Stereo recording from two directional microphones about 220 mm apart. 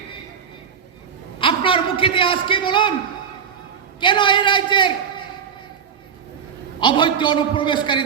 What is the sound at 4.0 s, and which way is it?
Speech, 20° left (ahead or behind).